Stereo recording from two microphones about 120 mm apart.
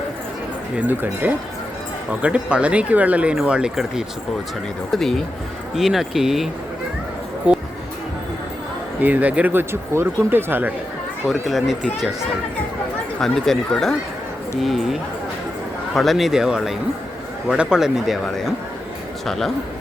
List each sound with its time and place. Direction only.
0.8 s speech: 15° right (ahead or behind)
7.5 s music: 10° right (ahead or behind)
9.0 s speech: 15° right (ahead or behind)
11.3 s speech: centre (ahead or behind)
13.1 s speech: 5° left (ahead or behind)
16.0 s speech: centre (ahead or behind)